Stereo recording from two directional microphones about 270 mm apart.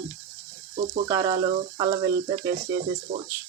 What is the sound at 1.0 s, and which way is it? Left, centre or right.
Speech, centre.